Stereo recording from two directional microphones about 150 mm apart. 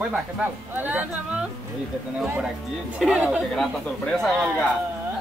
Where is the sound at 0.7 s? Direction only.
10° right (ahead or behind).